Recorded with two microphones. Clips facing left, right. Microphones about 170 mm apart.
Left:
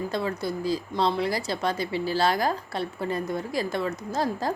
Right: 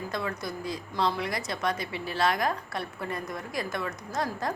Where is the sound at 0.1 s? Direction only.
30° left (ahead or behind).